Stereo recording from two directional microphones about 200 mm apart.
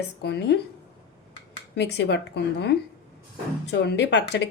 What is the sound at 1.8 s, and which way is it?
Speech, 60° left (ahead or behind).